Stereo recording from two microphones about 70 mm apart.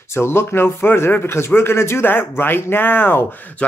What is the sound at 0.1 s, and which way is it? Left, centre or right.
A man's voice, left.